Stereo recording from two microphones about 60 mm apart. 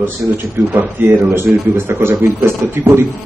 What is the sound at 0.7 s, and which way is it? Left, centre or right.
A man's voice, right.